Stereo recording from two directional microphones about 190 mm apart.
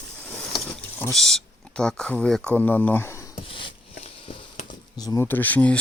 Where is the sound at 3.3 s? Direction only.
30° left (ahead or behind); by 5.7 s 10° left (ahead or behind).